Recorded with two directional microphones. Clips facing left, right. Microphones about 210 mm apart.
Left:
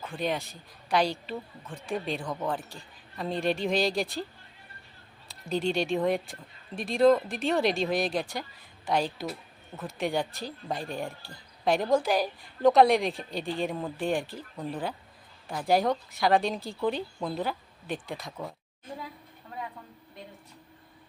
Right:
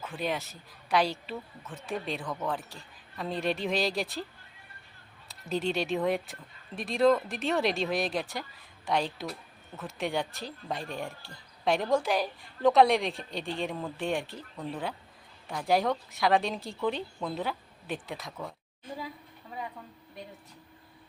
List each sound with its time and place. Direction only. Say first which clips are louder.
0.0 s a woman's voice: left 2 dB; 5° right (ahead or behind)
5.3 s a woman's voice: left 2 dB; centre (ahead or behind)